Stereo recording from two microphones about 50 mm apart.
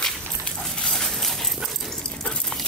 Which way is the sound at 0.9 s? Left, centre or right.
Centre.